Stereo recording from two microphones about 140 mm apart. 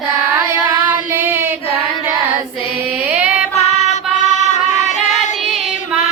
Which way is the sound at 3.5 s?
50° left (ahead or behind).